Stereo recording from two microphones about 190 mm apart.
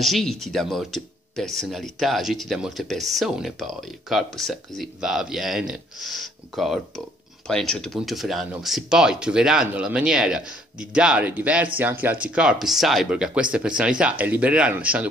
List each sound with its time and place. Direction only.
0.0 s speech: centre (ahead or behind)